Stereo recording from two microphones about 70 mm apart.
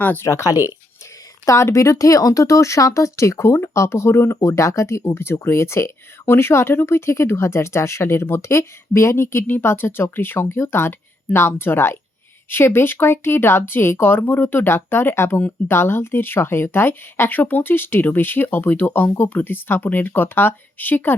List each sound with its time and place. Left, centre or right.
0.0 s speech: left
0.3 s speech: left
0.5 s speech: right
1.5 s speech: left
4.4 s speech: left
15.4 s speech: left
15.7 s speech: left